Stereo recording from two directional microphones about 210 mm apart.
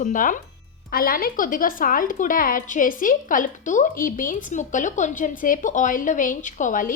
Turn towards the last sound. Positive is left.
turn(degrees=40)  # may be behind; listen again after turning